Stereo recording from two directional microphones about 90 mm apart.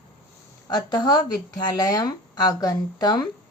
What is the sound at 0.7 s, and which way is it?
Speech, 50° left (ahead or behind).